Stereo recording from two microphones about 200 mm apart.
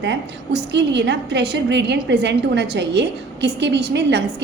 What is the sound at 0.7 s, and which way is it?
A woman's voice, 60° right (ahead or behind).